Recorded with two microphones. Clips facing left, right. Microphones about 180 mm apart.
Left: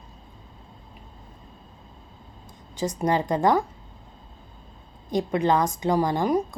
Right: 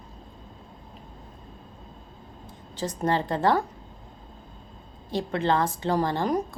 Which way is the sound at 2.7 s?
10° left (ahead or behind).